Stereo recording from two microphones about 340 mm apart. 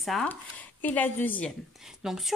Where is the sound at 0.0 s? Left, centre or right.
Centre.